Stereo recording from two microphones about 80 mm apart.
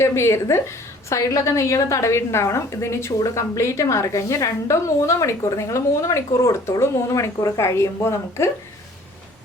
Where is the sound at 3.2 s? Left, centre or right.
Left.